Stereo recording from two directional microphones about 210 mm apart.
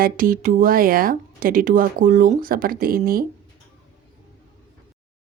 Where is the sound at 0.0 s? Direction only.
40° right (ahead or behind).